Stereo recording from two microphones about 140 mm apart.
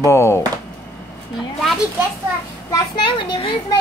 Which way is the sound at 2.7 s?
35° left (ahead or behind).